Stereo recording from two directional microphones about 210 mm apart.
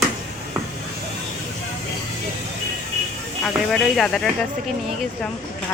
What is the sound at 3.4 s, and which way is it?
Speech, centre (ahead or behind).